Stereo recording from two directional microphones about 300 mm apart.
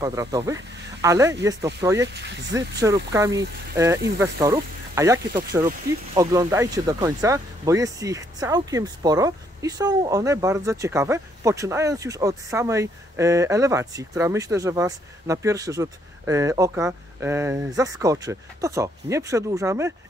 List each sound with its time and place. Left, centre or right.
0.0 s speech: centre
2.1 s speech: right
3.1 s speech: centre